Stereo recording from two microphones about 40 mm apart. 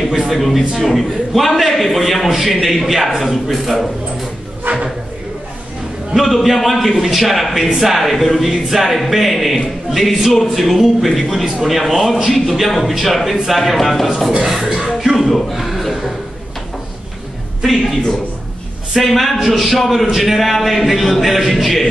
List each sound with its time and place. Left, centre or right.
0.3 s a man's voice: centre
4.7 s a sound: right
6.1 s a man's voice: centre
18.9 s a man's voice: centre